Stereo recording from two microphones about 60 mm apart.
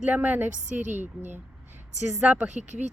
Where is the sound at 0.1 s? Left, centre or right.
Right.